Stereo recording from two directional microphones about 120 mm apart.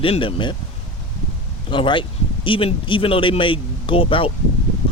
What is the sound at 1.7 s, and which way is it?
Speech, 45° left (ahead or behind).